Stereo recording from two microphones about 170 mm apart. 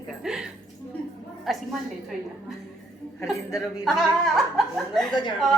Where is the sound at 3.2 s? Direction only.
20° left (ahead or behind).